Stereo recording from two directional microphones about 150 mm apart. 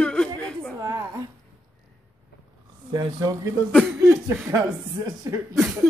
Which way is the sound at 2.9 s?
25° right (ahead or behind).